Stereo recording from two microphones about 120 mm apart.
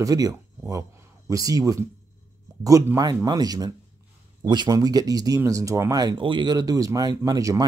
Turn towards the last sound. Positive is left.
turn(degrees=-30)  # may be behind; listen again after turning